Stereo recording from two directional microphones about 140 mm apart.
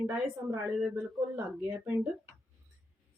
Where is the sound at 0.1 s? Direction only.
5° right (ahead or behind).